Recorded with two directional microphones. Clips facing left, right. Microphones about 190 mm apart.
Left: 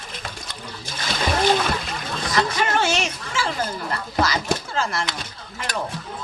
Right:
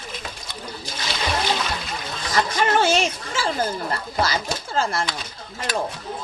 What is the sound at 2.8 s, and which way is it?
Speech, 30° right (ahead or behind).